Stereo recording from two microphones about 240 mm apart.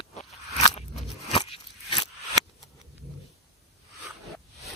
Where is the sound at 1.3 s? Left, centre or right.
Left.